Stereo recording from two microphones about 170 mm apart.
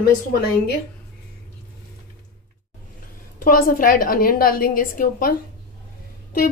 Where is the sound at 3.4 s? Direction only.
55° left (ahead or behind).